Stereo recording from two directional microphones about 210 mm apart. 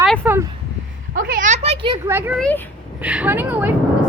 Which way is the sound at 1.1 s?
40° right (ahead or behind).